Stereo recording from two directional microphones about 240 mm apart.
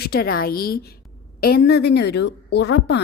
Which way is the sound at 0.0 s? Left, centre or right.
Left.